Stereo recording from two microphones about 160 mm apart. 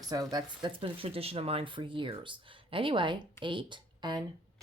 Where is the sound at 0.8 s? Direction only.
35° right (ahead or behind).